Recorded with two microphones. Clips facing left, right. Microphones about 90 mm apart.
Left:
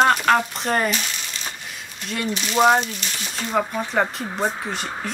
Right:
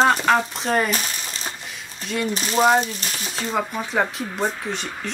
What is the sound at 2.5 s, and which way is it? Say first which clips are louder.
Speech: left 1 dB; centre (ahead or behind).